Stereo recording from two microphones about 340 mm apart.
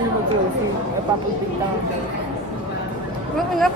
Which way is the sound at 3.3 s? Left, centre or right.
Centre.